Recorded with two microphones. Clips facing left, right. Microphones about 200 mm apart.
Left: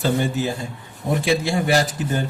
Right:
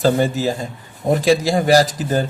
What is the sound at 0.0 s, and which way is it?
A man's voice, 40° right (ahead or behind).